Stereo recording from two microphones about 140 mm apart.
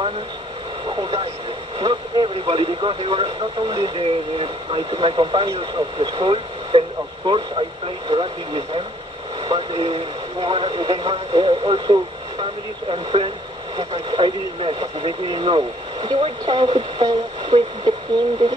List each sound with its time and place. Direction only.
0.8 s vehicle: 35° right (ahead or behind)
1.8 s speech: 35° right (ahead or behind)